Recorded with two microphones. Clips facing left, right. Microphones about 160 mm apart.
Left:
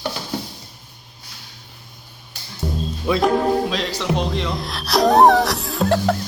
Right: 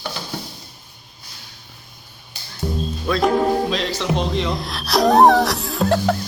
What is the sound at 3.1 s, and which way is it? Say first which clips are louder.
Speech: left 2 dB; 15° left (ahead or behind).